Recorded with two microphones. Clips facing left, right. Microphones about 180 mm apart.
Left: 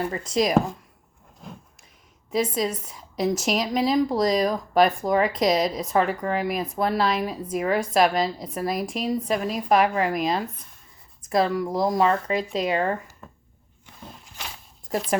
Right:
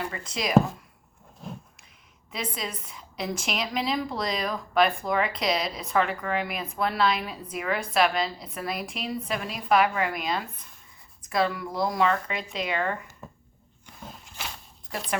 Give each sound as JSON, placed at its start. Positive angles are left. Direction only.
{"t": 0.0, "sound": "a woman's voice", "side_deg": 40}
{"t": 2.3, "sound": "a woman's voice", "side_deg": 40}